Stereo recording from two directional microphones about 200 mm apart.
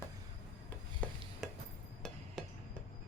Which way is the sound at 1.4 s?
Centre (ahead or behind).